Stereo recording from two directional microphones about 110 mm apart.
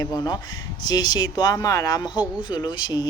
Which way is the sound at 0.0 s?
35° left (ahead or behind).